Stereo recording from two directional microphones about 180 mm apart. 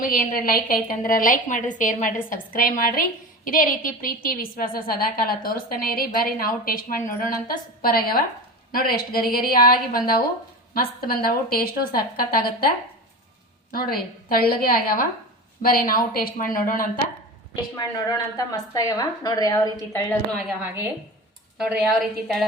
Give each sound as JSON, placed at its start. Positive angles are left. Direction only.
{"t": 0.0, "sound": "a woman's voice", "side_deg": 50}
{"t": 18.3, "sound": "a woman's voice", "side_deg": 20}
{"t": 20.6, "sound": "a woman's voice", "side_deg": -10}